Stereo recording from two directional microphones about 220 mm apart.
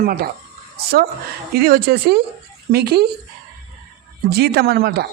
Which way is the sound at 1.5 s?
45° right (ahead or behind).